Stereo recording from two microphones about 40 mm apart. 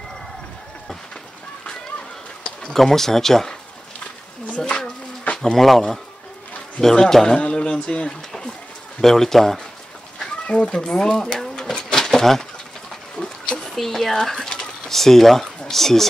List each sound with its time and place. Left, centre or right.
2.7 s speech: centre
4.6 s a sound: centre
5.4 s speech: centre
7.3 s speech: left
9.0 s speech: centre
10.1 s speech: left
11.3 s pigeon: centre
13.6 s a sound: centre
15.7 s speech: centre